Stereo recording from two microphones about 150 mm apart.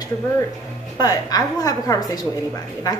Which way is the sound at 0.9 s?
25° left (ahead or behind).